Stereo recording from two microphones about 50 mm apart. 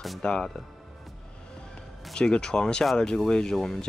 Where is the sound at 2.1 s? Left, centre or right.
Centre.